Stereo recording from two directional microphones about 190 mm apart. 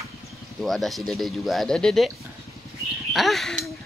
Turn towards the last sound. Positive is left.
turn(degrees=0)  # may be behind; listen again after turning